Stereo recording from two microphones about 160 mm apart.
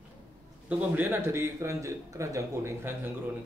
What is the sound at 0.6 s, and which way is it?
A man's voice, 10° right (ahead or behind).